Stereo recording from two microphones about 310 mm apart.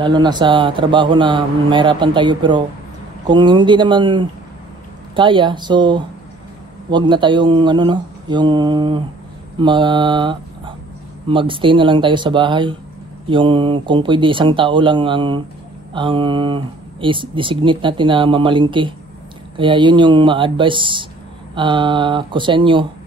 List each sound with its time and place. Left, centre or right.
0.0 s speech: centre
9.6 s mantra: centre
11.2 s speech: centre